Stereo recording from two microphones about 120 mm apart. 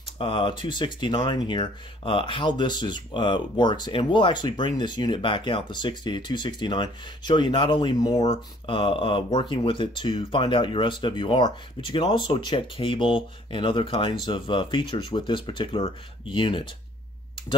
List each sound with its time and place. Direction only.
0.2 s speech: 50° left (ahead or behind)
8.2 s speech: 50° left (ahead or behind)